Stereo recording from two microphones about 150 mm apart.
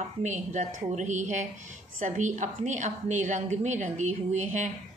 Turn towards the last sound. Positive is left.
turn(degrees=-55)  # may be behind; listen again after turning